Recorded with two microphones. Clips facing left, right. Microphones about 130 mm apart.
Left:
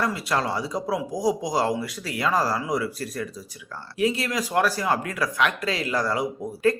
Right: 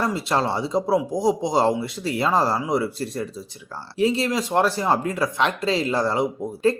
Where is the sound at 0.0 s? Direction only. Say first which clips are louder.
Right 3 dB; 25° right (ahead or behind).